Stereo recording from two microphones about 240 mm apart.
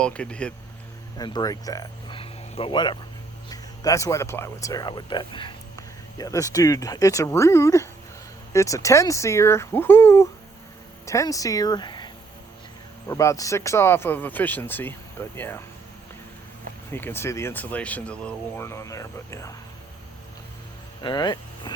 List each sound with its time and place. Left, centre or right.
0.0 s speech: centre
1.2 s speech: centre
16.9 s speech: centre
21.0 s speech: centre